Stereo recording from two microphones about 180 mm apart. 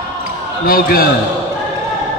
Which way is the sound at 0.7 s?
55° left (ahead or behind).